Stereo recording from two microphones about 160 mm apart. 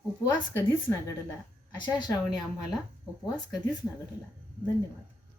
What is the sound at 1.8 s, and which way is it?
Speech, 25° left (ahead or behind).